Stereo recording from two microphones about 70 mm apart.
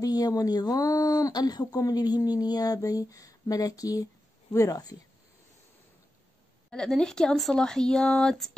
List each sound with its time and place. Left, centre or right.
0.0 s speech: left
6.7 s speech: centre